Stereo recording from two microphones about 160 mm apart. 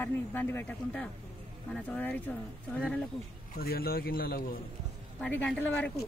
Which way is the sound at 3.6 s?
70° left (ahead or behind).